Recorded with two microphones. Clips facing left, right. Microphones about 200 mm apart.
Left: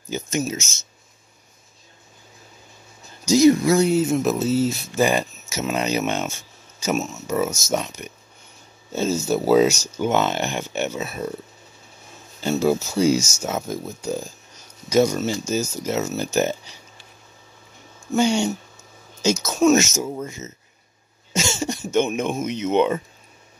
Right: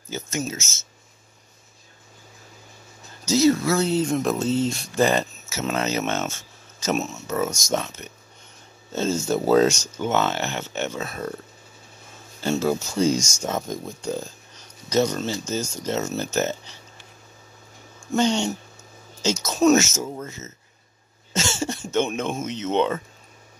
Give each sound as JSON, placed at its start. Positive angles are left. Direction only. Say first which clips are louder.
{"t": 0.1, "sound": "speech", "louder": "left 4 dB", "side_deg": 15}
{"t": 3.3, "sound": "speech", "louder": "left 4 dB", "side_deg": 15}
{"t": 18.1, "sound": "speech", "louder": "left 2 dB", "side_deg": 10}
{"t": 19.5, "sound": "speech", "louder": "even", "side_deg": 0}
{"t": 19.8, "sound": "speech", "louder": "left 3 dB", "side_deg": 15}